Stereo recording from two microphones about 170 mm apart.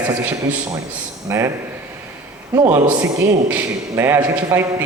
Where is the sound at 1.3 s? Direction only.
15° right (ahead or behind).